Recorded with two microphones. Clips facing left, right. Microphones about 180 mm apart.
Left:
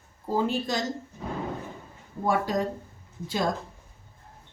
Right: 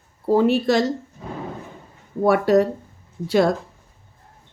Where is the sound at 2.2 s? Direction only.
70° right (ahead or behind).